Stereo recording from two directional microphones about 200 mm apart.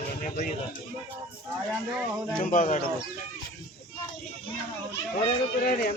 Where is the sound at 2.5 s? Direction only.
40° left (ahead or behind).